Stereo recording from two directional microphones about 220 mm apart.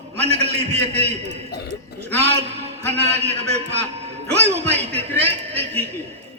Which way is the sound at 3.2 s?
30° right (ahead or behind).